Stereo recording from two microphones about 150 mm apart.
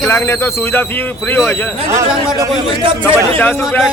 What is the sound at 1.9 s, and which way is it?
Speech, 20° right (ahead or behind).